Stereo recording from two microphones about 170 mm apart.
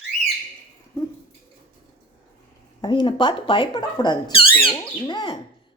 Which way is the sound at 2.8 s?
25° left (ahead or behind).